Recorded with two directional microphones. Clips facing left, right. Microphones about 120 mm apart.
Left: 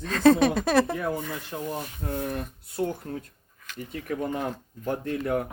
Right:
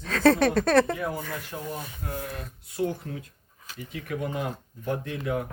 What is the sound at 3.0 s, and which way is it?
Speech, 40° left (ahead or behind).